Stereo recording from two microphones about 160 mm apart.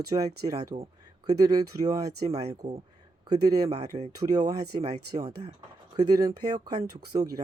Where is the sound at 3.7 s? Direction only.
45° right (ahead or behind).